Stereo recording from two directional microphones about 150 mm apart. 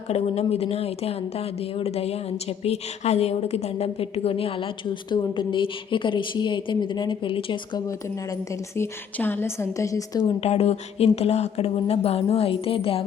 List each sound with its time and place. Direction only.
0.1 s a woman's voice: 45° left (ahead or behind)
8.7 s a woman's voice: 15° left (ahead or behind)
10.2 s speech: 45° left (ahead or behind)